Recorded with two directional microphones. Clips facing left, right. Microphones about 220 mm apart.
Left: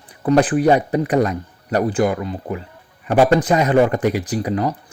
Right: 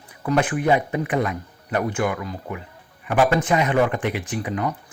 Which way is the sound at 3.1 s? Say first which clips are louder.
Left 5 dB; 40° left (ahead or behind).